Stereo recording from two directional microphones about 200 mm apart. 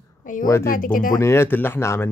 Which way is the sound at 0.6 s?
45° left (ahead or behind).